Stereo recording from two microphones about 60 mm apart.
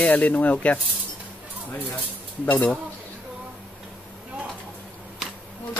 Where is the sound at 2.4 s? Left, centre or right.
Left.